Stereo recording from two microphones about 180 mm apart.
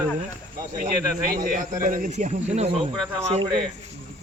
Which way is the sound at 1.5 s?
45° right (ahead or behind).